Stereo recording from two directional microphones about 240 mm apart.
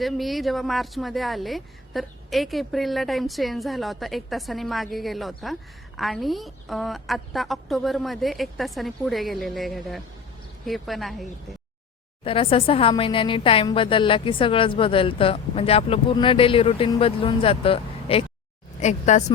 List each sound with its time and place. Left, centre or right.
0.0 s a woman's voice: centre
12.2 s speech: left